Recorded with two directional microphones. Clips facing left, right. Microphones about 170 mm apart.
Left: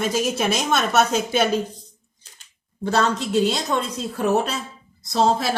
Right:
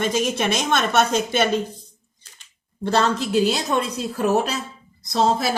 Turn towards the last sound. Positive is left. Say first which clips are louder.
# even
turn(degrees=0)  # may be behind; listen again after turning